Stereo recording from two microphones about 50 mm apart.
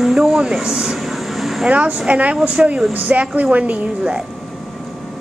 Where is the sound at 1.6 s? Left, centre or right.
Right.